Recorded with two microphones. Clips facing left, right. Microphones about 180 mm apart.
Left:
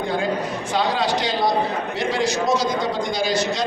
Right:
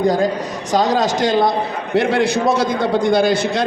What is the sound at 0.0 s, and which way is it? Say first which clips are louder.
A man's voice: right 6 dB; 40° right (ahead or behind).